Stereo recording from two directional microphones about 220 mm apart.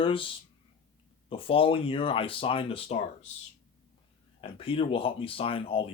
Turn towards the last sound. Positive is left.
turn(degrees=25)  # may be behind; listen again after turning